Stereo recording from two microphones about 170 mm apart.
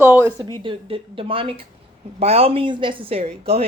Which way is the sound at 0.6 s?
30° right (ahead or behind).